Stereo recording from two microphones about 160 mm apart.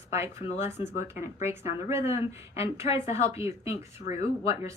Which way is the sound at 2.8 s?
45° left (ahead or behind).